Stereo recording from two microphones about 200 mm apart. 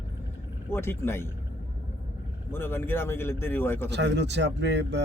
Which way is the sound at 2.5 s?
10° left (ahead or behind).